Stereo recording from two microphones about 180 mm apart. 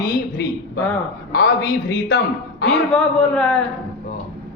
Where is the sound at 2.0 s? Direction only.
65° left (ahead or behind).